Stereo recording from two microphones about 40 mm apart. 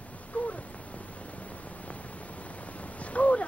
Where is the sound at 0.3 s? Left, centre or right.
Left.